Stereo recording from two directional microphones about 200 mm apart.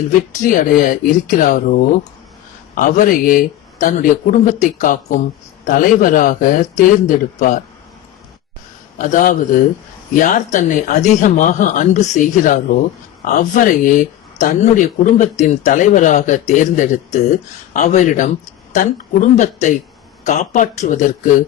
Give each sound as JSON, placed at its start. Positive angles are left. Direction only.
{"t": 0.1, "sound": "speech", "side_deg": 40}
{"t": 9.0, "sound": "speech", "side_deg": 40}